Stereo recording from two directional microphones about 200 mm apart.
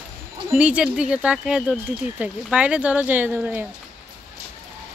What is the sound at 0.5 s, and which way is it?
Speech, 5° right (ahead or behind).